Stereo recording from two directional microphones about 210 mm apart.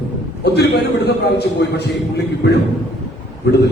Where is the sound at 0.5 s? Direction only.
50° left (ahead or behind).